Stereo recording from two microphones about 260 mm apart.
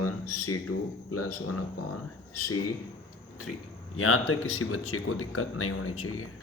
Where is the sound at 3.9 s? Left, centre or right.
Left.